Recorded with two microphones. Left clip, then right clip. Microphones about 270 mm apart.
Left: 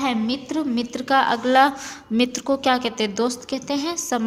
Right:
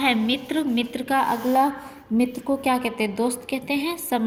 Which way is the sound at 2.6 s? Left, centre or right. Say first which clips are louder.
Left 2 dB; left.